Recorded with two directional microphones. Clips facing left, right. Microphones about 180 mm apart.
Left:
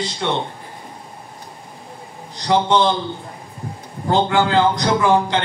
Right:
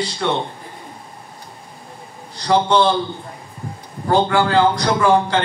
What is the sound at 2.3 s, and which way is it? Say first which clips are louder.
Speech: right 1 dB; 20° left (ahead or behind).